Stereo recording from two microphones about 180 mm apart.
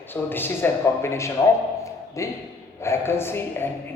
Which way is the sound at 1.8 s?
15° left (ahead or behind).